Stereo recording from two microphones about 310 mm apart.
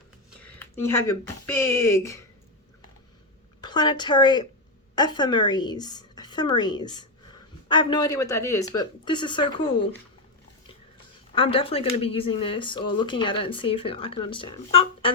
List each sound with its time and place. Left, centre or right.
0.4 s speech: centre
3.6 s a woman's voice: centre
11.3 s speech: centre